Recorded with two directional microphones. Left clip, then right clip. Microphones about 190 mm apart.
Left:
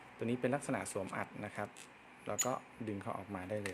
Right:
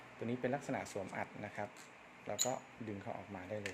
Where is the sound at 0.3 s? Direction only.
25° left (ahead or behind).